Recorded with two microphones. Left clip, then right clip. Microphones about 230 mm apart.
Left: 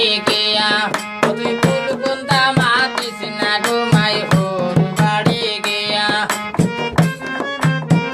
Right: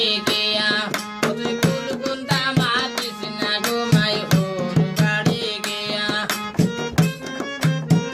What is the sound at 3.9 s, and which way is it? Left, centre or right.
Music, centre.